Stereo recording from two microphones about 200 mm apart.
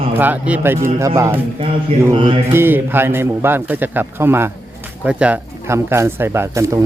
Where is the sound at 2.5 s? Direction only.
10° right (ahead or behind).